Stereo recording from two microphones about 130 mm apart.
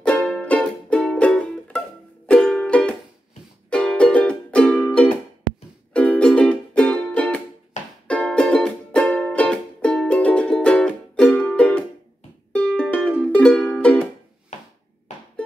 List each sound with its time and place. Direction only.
0.0 s music: 5° left (ahead or behind)
7.8 s music: 65° left (ahead or behind)
8.1 s music: 5° left (ahead or behind)